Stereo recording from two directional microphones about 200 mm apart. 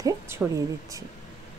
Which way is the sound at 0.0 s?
10° right (ahead or behind).